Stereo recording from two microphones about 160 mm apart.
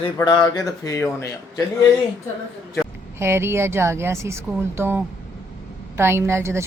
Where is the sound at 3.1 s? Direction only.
15° right (ahead or behind).